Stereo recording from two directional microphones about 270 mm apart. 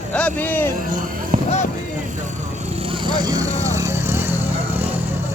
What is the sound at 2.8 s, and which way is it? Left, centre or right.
Vehicle, centre.